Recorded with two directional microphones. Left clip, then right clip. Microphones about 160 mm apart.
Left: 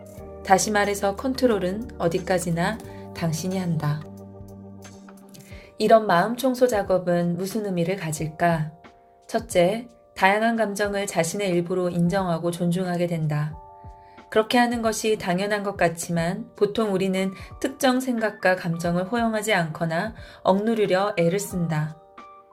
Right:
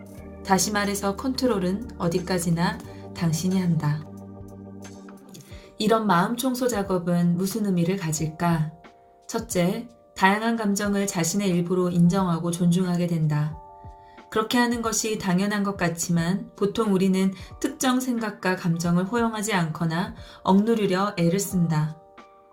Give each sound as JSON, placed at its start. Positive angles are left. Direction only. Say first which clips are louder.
{"t": 0.4, "sound": "a woman's voice", "louder": "left 4 dB", "side_deg": 40}
{"t": 5.8, "sound": "a woman's voice", "louder": "left 4 dB", "side_deg": 35}
{"t": 18.4, "sound": "a woman's voice", "louder": "left 4 dB", "side_deg": 40}